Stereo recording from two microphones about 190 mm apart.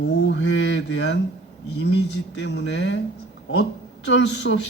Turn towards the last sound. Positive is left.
turn(degrees=65)  # may be behind; listen again after turning